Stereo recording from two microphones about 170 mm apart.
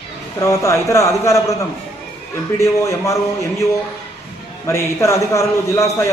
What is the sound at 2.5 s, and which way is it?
A man's voice, 20° left (ahead or behind).